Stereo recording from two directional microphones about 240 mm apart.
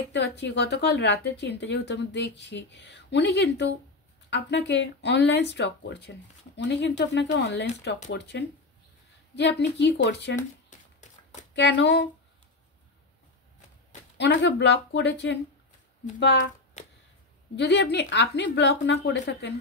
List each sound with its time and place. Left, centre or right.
0.1 s a woman's voice: left
10.7 s a sound: left
11.5 s a woman's voice: left
14.1 s a woman's voice: left
17.6 s a woman's voice: left